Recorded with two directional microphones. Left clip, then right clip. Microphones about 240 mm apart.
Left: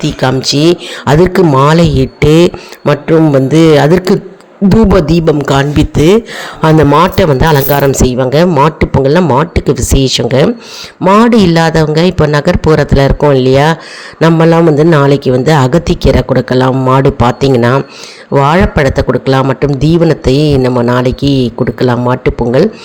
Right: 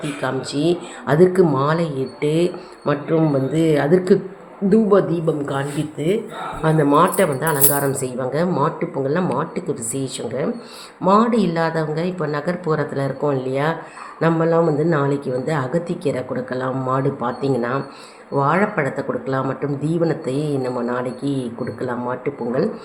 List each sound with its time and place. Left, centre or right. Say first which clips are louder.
0.0 s a man's voice: left 12 dB; left